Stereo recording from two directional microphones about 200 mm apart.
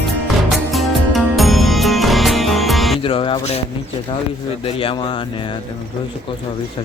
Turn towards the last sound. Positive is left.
turn(degrees=25)  # may be behind; listen again after turning